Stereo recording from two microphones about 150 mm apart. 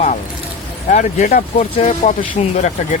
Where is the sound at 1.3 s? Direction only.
65° left (ahead or behind).